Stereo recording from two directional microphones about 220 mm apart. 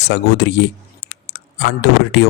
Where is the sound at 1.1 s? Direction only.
50° left (ahead or behind).